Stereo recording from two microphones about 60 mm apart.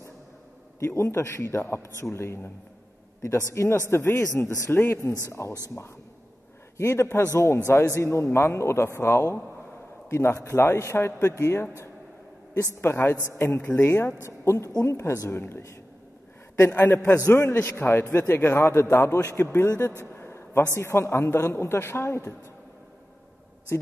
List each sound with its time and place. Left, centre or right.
0.7 s a man's voice: left
3.9 s speech: left
5.4 s a man's voice: left
6.8 s a man's voice: left
12.8 s a man's voice: left
15.2 s a man's voice: left
17.0 s a man's voice: left
17.3 s a man's voice: left
20.1 s a sound: left
20.7 s a man's voice: left